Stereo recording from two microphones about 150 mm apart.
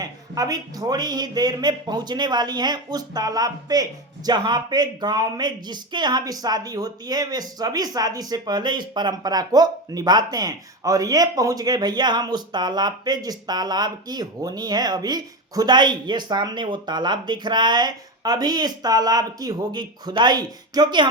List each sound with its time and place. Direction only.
0.0 s speech: 25° right (ahead or behind)